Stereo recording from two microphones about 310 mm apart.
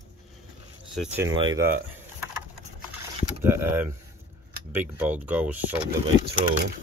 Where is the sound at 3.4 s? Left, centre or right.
Centre.